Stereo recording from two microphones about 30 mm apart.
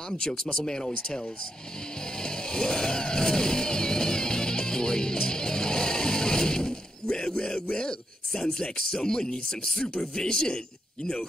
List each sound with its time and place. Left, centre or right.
0.2 s speech: left
2.1 s music: left
7.7 s speech: left